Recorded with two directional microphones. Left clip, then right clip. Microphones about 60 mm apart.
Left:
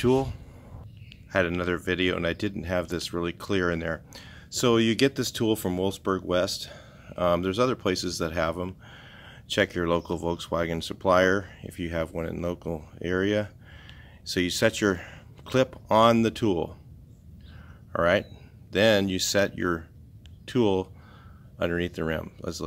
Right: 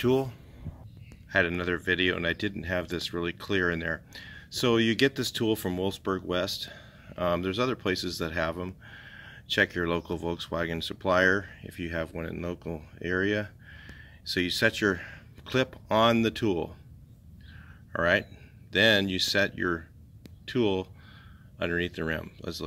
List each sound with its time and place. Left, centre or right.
1.3 s speech: left
4.3 s speech: centre; by 16.7 s left
17.9 s speech: left
19.1 s speech: left
20.4 s speech: left
21.5 s speech: left